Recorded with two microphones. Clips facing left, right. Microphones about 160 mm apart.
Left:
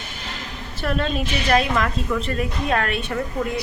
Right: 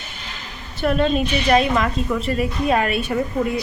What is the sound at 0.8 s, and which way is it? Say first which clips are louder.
A woman's voice: right 5 dB; 5° right (ahead or behind).